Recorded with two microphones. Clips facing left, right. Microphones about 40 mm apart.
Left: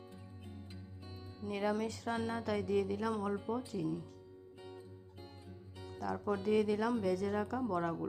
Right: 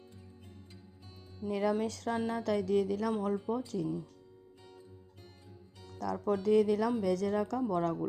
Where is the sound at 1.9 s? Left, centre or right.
Right.